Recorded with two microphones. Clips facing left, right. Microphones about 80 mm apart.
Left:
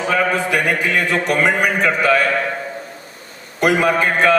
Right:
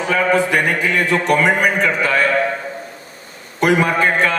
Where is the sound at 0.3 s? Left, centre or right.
Right.